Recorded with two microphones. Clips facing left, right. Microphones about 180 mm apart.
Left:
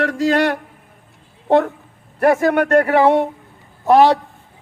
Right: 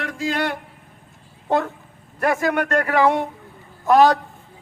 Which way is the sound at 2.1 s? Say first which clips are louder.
Left 6 dB; 30° left (ahead or behind).